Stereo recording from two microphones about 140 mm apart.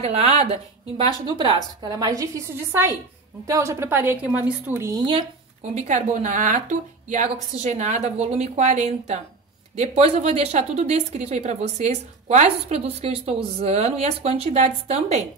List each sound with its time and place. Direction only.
0.0 s a woman's voice: 45° right (ahead or behind); by 4.8 s 10° right (ahead or behind)
4.8 s speech: 25° right (ahead or behind)
5.6 s a woman's voice: 55° right (ahead or behind)